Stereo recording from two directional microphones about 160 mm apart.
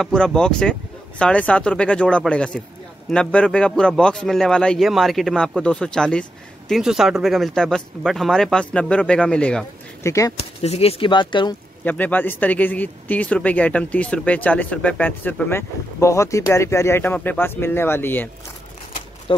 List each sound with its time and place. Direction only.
0.0 s a man's voice: 5° left (ahead or behind)
10.0 s speech: 20° left (ahead or behind)
10.3 s speech: 40° left (ahead or behind)
11.8 s speech: 10° left (ahead or behind)